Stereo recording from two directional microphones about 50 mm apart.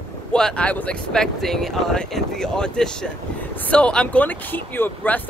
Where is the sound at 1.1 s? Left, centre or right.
Centre.